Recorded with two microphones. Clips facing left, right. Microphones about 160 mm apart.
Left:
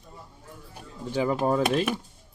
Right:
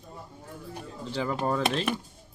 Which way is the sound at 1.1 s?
15° left (ahead or behind).